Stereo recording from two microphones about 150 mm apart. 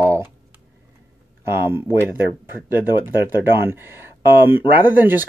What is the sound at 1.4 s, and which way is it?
Speech, 15° right (ahead or behind).